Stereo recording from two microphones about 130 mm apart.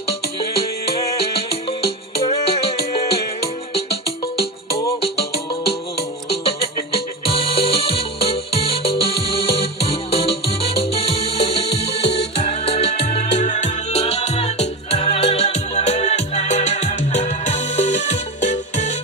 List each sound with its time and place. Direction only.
1.8 s music: 50° left (ahead or behind)
6.3 s music: 45° left (ahead or behind)
13.1 s music: 70° left (ahead or behind)